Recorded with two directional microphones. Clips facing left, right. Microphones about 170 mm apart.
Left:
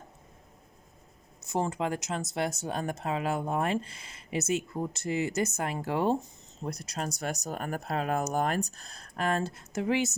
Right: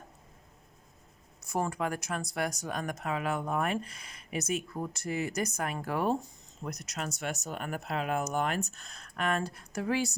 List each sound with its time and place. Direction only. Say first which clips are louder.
1.5 s speech: left 2 dB; 20° left (ahead or behind)